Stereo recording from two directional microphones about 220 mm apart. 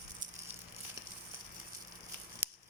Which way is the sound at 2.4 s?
10° right (ahead or behind).